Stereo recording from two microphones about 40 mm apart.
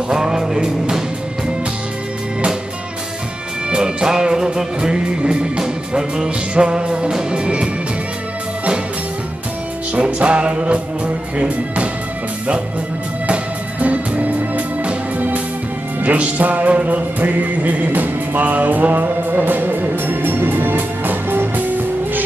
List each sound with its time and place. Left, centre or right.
0.1 s music: centre
3.7 s music: right
10.1 s music: right
13.3 s music: right